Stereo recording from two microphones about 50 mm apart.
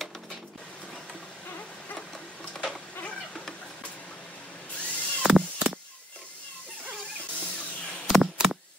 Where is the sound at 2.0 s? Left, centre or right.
Centre.